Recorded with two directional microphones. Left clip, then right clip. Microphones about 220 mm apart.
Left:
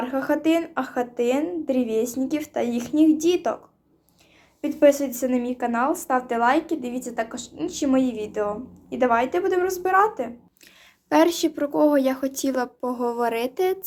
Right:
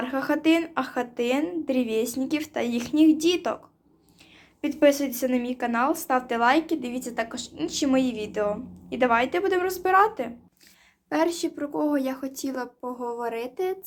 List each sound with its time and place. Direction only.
0.0 s speech: centre (ahead or behind)
4.6 s speech: 5° left (ahead or behind)
11.1 s speech: 20° left (ahead or behind)